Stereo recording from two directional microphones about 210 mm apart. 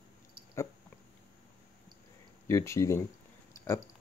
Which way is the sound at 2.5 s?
15° left (ahead or behind).